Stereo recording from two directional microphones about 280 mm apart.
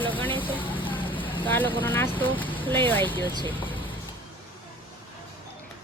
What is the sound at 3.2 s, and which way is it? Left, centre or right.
Speech, centre.